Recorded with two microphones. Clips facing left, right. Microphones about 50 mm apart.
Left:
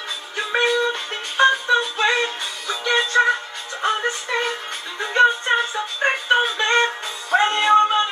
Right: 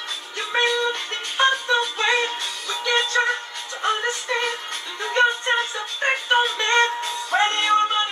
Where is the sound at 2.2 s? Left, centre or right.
Left.